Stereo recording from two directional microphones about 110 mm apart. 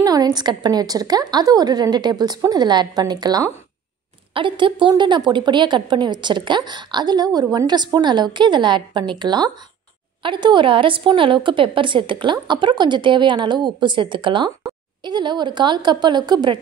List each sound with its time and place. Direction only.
0.0 s a woman's voice: 35° right (ahead or behind)
4.3 s speech: 50° right (ahead or behind)